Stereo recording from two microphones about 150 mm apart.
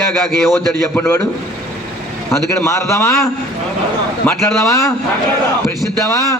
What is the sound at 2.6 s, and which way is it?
Speech, 20° left (ahead or behind).